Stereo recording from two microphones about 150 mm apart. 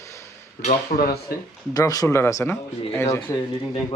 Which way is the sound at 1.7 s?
25° left (ahead or behind).